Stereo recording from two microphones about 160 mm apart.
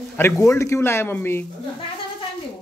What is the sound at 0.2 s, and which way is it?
Speech, 20° left (ahead or behind).